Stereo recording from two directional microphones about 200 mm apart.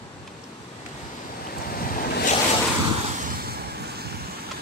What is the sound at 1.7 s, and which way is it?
Waves, 45° left (ahead or behind).